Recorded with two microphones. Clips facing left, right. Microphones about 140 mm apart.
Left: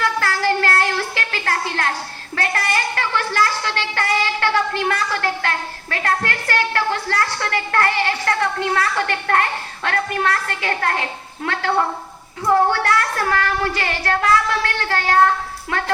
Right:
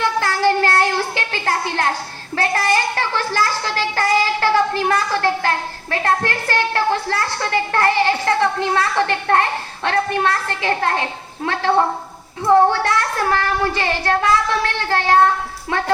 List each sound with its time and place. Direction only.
0.0 s child singing: 30° right (ahead or behind)
12.5 s child singing: 30° right (ahead or behind)